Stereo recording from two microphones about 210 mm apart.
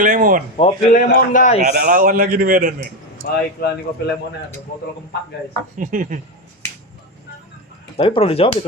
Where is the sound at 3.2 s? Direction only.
45° left (ahead or behind).